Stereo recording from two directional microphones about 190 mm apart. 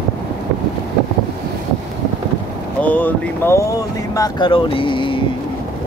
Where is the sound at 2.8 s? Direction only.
10° left (ahead or behind); by 5.2 s 25° left (ahead or behind).